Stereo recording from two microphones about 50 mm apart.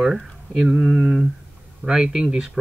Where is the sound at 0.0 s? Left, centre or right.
Centre.